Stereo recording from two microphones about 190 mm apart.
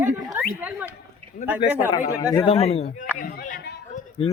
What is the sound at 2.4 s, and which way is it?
Speech, 30° left (ahead or behind).